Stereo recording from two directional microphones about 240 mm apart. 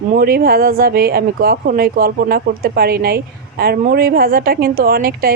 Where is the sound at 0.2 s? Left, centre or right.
Right.